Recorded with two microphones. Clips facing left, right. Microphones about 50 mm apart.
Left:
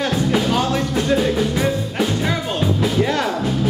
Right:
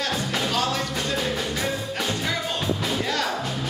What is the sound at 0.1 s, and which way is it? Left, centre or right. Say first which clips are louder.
Music: left 7 dB; centre.